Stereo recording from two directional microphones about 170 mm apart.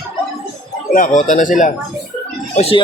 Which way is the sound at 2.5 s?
35° left (ahead or behind).